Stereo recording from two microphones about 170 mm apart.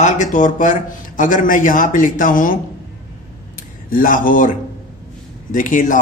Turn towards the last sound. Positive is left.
turn(degrees=50)  # may be behind; listen again after turning